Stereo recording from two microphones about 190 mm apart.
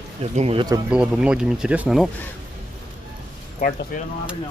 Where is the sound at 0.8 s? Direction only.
5° right (ahead or behind).